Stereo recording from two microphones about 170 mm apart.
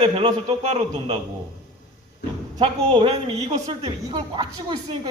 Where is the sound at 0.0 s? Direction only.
30° right (ahead or behind).